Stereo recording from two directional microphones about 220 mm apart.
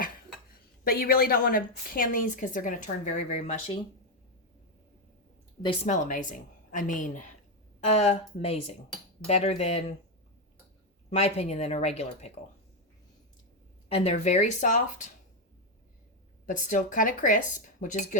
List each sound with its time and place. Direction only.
0.5 s a woman's voice: 40° left (ahead or behind)
5.6 s a woman's voice: 30° left (ahead or behind)
11.1 s speech: 30° left (ahead or behind)
13.9 s a woman's voice: 30° left (ahead or behind)
16.5 s a woman's voice: 35° left (ahead or behind)